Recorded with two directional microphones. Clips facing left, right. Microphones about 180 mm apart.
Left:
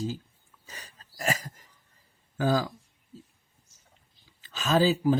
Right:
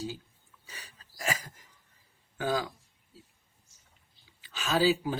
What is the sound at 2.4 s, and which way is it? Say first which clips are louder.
Speech: left 5 dB; 40° left (ahead or behind).